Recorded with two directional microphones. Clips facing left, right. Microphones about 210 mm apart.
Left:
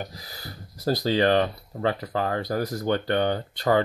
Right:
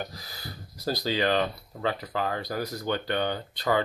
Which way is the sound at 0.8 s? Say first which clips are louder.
Left 5 dB; 50° left (ahead or behind).